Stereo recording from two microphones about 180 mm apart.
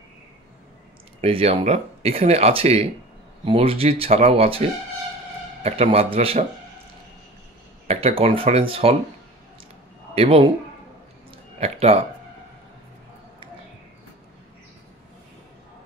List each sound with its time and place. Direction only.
1.2 s speech: 35° right (ahead or behind)
7.9 s speech: 30° right (ahead or behind)
10.1 s speech: 30° right (ahead or behind)
11.6 s speech: 35° right (ahead or behind)